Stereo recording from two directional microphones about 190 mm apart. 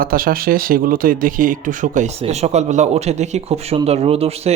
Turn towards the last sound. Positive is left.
turn(degrees=-30)  # may be behind; listen again after turning